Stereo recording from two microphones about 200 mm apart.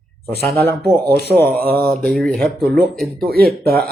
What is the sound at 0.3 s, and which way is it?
Speech, 50° right (ahead or behind).